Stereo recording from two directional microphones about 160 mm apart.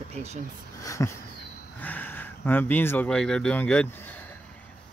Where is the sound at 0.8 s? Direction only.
20° left (ahead or behind).